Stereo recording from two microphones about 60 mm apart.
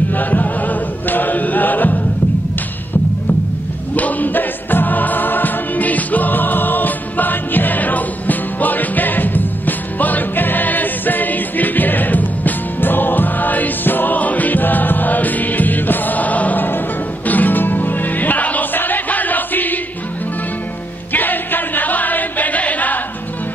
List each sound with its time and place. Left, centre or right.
0.1 s chant: left
3.9 s choir: left
17.3 s music: left
21.1 s music: left